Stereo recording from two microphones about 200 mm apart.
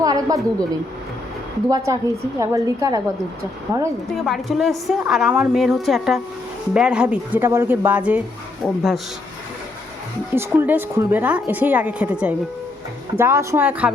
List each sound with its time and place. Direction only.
0.0 s a sound: 20° right (ahead or behind)
1.7 s a woman's voice: 15° right (ahead or behind)
4.1 s a woman's voice: centre (ahead or behind)
10.3 s a woman's voice: 10° right (ahead or behind)